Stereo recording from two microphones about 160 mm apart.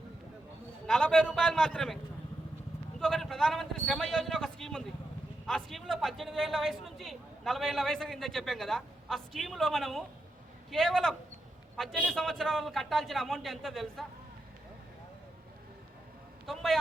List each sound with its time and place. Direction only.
0.9 s a man's voice: 5° left (ahead or behind)
3.0 s a man's voice: centre (ahead or behind)
16.5 s a man's voice: centre (ahead or behind)